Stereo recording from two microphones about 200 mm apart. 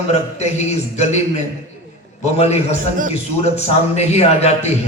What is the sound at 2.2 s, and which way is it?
A man's voice, 35° left (ahead or behind).